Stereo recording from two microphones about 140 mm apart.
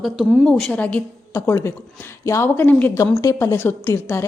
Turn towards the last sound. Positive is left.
turn(degrees=15)  # may be behind; listen again after turning